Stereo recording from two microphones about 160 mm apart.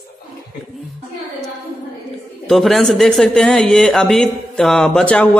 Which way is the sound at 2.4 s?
Centre (ahead or behind).